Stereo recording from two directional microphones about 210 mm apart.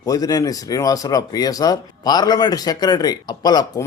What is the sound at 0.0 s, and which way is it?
Speech, 15° left (ahead or behind).